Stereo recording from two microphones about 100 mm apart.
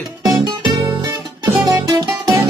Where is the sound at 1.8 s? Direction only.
35° right (ahead or behind).